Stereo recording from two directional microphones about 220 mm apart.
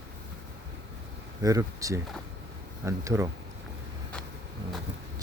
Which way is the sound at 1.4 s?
15° right (ahead or behind).